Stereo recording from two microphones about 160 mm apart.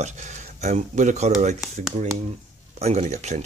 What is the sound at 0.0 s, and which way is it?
Speech, 45° right (ahead or behind).